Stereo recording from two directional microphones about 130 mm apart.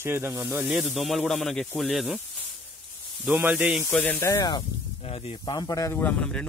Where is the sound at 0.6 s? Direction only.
Centre (ahead or behind).